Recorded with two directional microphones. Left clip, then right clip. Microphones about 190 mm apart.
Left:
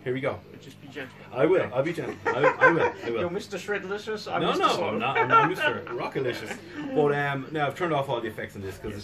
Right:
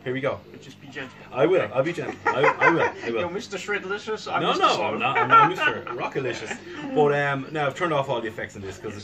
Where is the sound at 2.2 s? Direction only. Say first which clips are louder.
Right 1 dB; 15° left (ahead or behind).